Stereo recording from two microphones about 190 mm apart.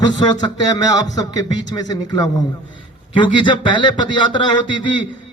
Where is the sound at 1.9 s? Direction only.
20° left (ahead or behind).